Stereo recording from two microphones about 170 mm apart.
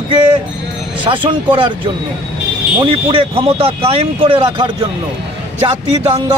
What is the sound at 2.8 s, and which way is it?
Speech, 30° right (ahead or behind).